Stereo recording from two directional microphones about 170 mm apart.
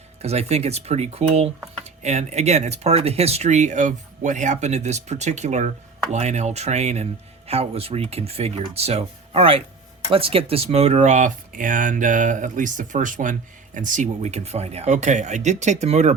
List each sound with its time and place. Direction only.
0.2 s speech: 40° right (ahead or behind)